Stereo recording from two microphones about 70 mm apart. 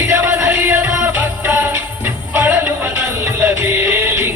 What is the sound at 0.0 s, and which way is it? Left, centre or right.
Music, right.